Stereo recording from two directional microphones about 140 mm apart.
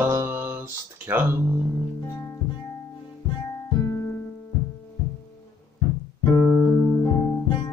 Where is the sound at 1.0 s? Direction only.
10° right (ahead or behind).